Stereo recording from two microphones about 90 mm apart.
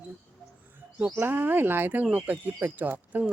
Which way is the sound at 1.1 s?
25° right (ahead or behind).